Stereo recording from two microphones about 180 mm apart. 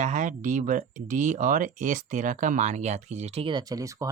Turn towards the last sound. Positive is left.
turn(degrees=-20)  # may be behind; listen again after turning